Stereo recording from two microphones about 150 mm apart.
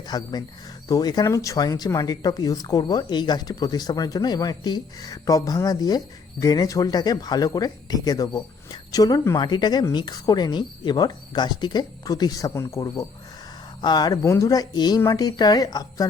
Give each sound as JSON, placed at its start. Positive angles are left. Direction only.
{"t": 0.1, "sound": "speech", "side_deg": 25}